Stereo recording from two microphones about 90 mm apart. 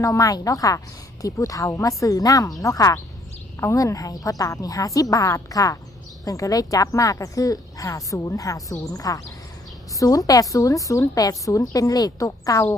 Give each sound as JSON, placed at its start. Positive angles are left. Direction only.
{"t": 0.0, "sound": "speech", "side_deg": 40}